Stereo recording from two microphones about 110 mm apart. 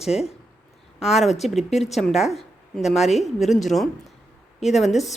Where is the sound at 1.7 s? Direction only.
85° left.